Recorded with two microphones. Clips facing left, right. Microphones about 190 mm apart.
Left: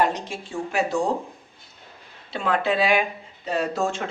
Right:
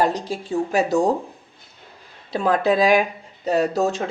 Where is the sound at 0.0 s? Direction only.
35° right (ahead or behind).